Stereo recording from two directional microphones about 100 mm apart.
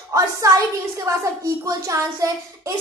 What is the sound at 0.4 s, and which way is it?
A woman's voice, 35° right (ahead or behind).